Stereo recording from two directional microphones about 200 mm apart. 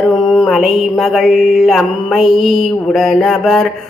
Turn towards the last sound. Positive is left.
turn(degrees=0)  # may be behind; listen again after turning